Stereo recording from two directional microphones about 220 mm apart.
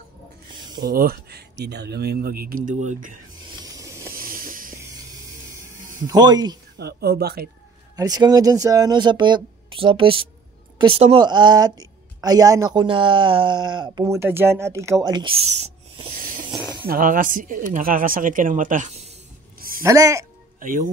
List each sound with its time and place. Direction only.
0.8 s speech: 40° right (ahead or behind)
3.4 s a sound: 15° right (ahead or behind)
4.1 s vehicle: 40° right (ahead or behind)
6.0 s speech: 20° right (ahead or behind)
6.8 s speech: 45° right (ahead or behind)
7.9 s a woman's voice: 15° right (ahead or behind)
16.8 s speech: 40° right (ahead or behind)
19.8 s speech: 15° right (ahead or behind)
20.5 s speech: 40° right (ahead or behind)